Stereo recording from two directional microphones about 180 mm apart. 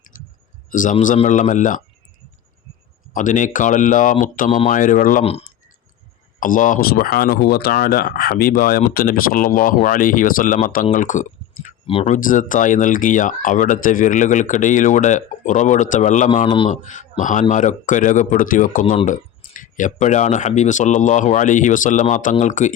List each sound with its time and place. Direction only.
0.1 s clicking: 45° left (ahead or behind)
0.7 s a man's voice: 45° left (ahead or behind)
3.1 s speech: 45° left (ahead or behind)
4.4 s speech: 35° left (ahead or behind)
4.7 s speech: 45° left (ahead or behind)
5.2 s speech: 35° left (ahead or behind)
6.4 s speech: 45° left (ahead or behind)
11.9 s speech: 30° left (ahead or behind)
12.1 s speech: 45° left (ahead or behind)